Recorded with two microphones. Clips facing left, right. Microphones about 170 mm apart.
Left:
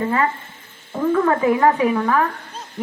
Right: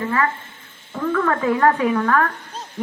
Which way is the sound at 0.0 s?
25° left (ahead or behind).